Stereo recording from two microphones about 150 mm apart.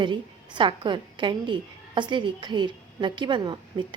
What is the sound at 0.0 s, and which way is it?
A woman's voice, 30° right (ahead or behind).